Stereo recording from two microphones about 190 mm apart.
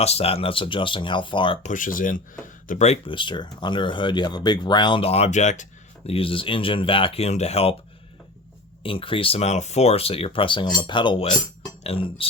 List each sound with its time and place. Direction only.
0.0 s speech: 30° left (ahead or behind)
1.6 s speech: 45° left (ahead or behind)
8.8 s speech: 30° left (ahead or behind)